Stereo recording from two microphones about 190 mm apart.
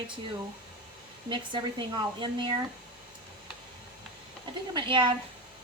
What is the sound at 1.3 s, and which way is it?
A woman's voice, 25° right (ahead or behind).